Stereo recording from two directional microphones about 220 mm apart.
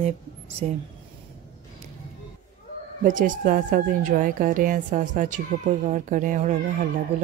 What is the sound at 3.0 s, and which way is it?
Speech, 35° right (ahead or behind).